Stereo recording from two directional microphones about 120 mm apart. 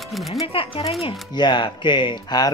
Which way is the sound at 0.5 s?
50° left (ahead or behind).